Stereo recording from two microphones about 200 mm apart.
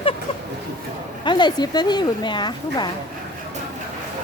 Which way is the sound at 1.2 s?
20° left (ahead or behind).